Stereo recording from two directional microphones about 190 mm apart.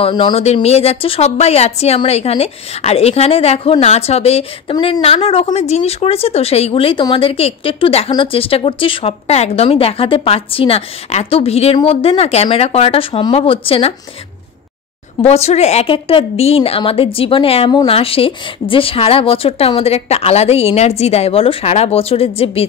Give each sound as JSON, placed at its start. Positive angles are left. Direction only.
{"t": 0.0, "sound": "speech", "side_deg": 25}
{"t": 15.2, "sound": "speech", "side_deg": 35}